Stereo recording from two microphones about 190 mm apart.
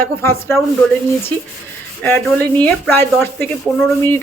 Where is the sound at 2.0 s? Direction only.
10° left (ahead or behind).